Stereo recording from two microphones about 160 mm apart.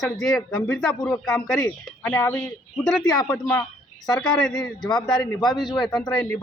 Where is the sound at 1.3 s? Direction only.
15° left (ahead or behind).